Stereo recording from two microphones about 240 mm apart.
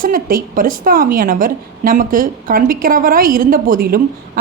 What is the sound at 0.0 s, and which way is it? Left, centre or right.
A woman's voice, right.